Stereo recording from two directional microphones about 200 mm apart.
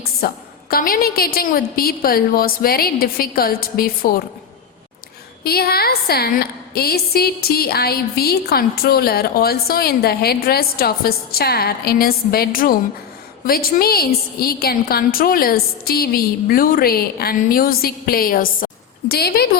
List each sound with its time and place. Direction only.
0.2 s a woman's voice: 50° left (ahead or behind)
5.4 s a woman's voice: 50° left (ahead or behind)